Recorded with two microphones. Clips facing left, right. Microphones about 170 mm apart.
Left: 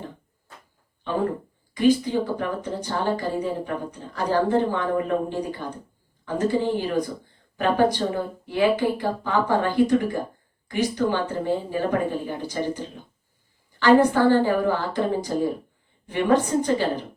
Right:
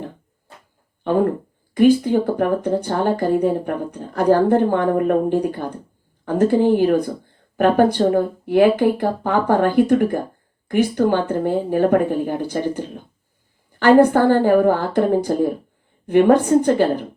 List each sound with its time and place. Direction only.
1.7 s speech: 55° right (ahead or behind)